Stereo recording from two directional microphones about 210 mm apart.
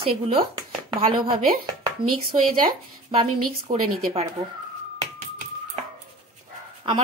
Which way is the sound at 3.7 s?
35° right (ahead or behind).